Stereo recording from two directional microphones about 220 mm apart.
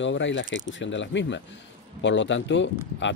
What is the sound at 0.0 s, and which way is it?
A man's voice, 55° left (ahead or behind).